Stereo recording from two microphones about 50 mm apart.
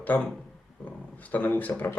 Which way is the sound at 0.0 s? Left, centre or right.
Left.